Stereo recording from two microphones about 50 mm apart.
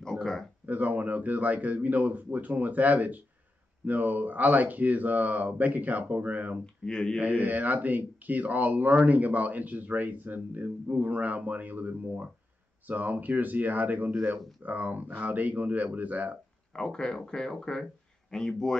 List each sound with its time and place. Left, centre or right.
0.0 s a sound: centre
0.7 s speech: right
6.6 s speech: centre
7.2 s speech: right
16.7 s speech: centre